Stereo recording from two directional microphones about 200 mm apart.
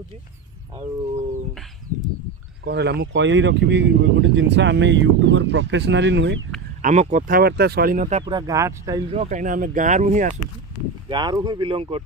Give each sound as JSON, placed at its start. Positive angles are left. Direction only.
{"t": 2.6, "sound": "speech", "side_deg": -60}
{"t": 6.8, "sound": "speech", "side_deg": -35}
{"t": 8.2, "sound": "speech", "side_deg": -20}
{"t": 9.1, "sound": "speech", "side_deg": -35}
{"t": 11.1, "sound": "speech", "side_deg": -20}